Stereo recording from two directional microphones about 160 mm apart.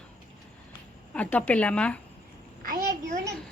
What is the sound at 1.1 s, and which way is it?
Speech, 10° left (ahead or behind).